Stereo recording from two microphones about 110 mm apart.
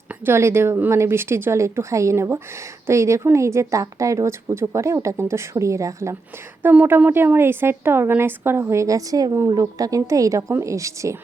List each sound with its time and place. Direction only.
0.3 s a woman's voice: 25° right (ahead or behind)